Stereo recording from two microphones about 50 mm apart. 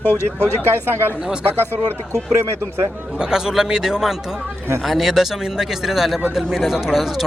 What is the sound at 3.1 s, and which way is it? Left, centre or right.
Speech, centre.